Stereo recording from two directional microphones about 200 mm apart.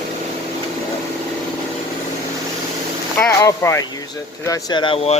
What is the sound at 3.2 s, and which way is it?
Speech, 10° left (ahead or behind).